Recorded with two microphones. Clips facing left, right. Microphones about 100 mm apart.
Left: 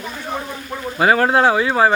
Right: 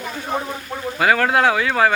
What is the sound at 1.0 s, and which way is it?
Speech, 25° left (ahead or behind).